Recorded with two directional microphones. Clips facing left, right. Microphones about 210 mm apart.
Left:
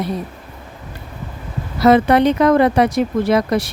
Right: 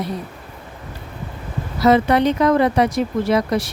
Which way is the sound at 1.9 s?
60° left (ahead or behind).